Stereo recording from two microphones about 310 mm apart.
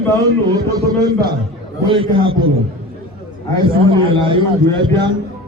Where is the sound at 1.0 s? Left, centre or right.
Centre.